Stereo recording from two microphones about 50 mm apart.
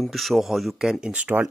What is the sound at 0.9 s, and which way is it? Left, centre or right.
Speech, centre.